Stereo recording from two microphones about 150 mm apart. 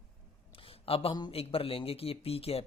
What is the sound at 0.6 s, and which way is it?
Speech, 40° left (ahead or behind).